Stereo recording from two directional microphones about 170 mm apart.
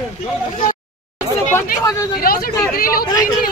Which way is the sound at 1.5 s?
20° left (ahead or behind).